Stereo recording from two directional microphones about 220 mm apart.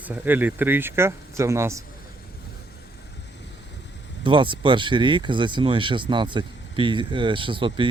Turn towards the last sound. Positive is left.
turn(degrees=-25)  # may be behind; listen again after turning